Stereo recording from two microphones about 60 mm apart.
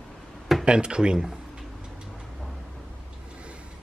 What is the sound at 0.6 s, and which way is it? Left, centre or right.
Speech, centre.